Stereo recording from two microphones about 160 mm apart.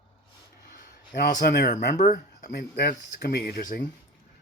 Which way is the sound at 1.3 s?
60° left (ahead or behind).